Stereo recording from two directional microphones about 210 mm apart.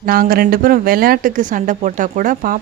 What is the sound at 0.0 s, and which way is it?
Speech, 45° right (ahead or behind).